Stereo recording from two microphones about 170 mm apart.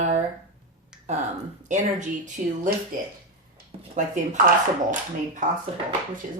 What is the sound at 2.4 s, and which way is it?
Speech, 50° right (ahead or behind).